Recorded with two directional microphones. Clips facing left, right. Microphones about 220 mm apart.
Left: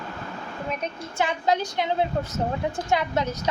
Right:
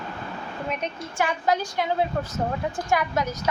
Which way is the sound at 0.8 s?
20° left (ahead or behind).